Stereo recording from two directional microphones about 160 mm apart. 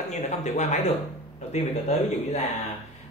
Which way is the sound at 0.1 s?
45° left (ahead or behind).